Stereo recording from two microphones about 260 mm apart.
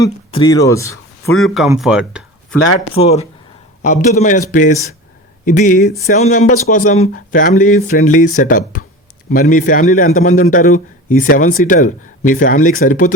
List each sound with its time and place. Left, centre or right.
0.0 s speech: centre
1.4 s speech: centre
2.9 s a man's voice: left